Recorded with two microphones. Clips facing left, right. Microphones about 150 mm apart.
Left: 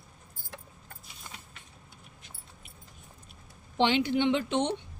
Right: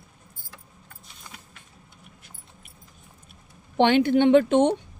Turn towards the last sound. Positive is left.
turn(degrees=-50)  # may be behind; listen again after turning